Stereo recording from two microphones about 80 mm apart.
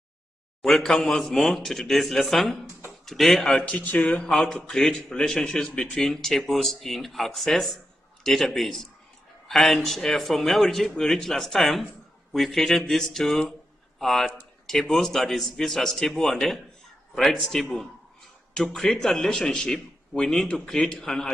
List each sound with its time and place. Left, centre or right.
0.6 s a man's voice: centre
3.6 s speech: centre
4.3 s a man's voice: centre